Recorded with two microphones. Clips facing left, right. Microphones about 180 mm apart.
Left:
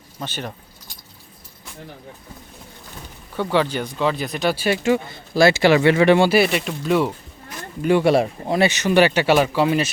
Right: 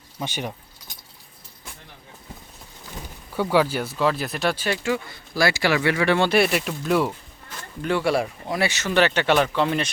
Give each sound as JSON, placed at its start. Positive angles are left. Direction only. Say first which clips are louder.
{"t": 0.2, "sound": "speech", "louder": "even", "side_deg": -10}
{"t": 3.3, "sound": "speech", "louder": "even", "side_deg": -5}
{"t": 4.5, "sound": "speech", "louder": "left 6 dB", "side_deg": 15}
{"t": 6.1, "sound": "speech", "louder": "left 3 dB", "side_deg": 5}
{"t": 7.8, "sound": "speech", "louder": "left 6 dB", "side_deg": 15}